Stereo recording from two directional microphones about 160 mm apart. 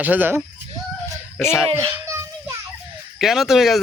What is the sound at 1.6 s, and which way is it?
Speech, 35° right (ahead or behind).